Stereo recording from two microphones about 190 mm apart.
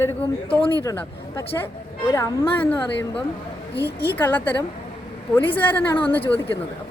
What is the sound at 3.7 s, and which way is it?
Speech, 60° left (ahead or behind).